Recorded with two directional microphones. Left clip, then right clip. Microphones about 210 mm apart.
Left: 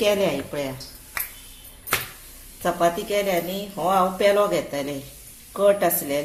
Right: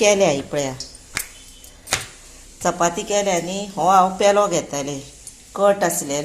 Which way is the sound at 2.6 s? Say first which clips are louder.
Right 2 dB; 30° right (ahead or behind).